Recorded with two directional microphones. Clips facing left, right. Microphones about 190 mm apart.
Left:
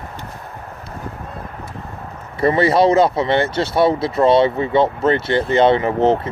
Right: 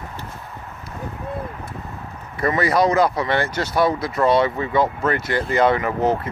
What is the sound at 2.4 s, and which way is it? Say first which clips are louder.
Speech: left 4 dB; 30° left (ahead or behind).